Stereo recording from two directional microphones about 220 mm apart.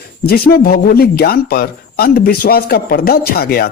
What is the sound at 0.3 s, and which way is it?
Speech, 45° left (ahead or behind).